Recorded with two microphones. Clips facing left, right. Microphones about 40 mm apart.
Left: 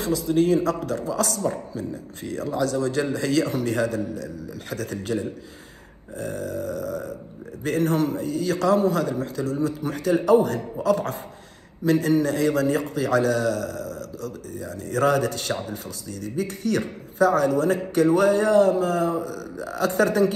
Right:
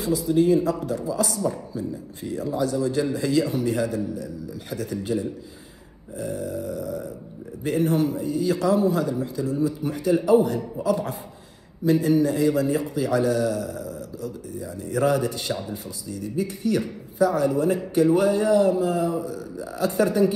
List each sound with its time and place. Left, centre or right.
0.3 s a man's voice: left
6.1 s burping: left
7.6 s a man's voice: left